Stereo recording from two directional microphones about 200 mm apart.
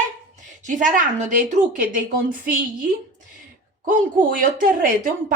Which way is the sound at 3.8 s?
45° right (ahead or behind).